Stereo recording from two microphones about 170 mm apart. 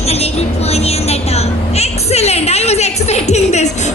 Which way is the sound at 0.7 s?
40° left (ahead or behind).